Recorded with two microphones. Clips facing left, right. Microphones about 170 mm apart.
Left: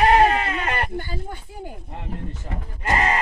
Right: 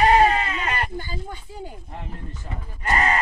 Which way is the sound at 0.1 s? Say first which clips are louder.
Left 1 dB; 60° left (ahead or behind).